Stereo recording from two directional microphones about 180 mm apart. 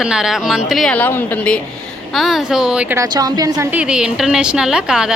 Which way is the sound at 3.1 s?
20° right (ahead or behind).